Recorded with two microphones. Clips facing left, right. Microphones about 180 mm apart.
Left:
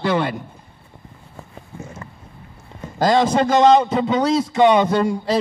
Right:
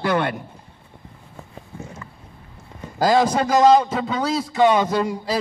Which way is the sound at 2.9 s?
Centre (ahead or behind).